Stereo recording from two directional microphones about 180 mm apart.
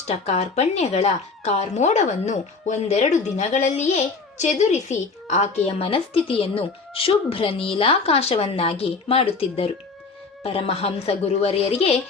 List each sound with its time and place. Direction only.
0.1 s speech: 35° left (ahead or behind)